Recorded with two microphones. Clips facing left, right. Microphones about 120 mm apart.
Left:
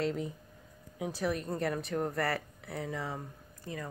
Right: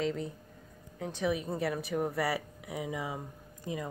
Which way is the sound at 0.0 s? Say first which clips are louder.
Even; 5° left (ahead or behind).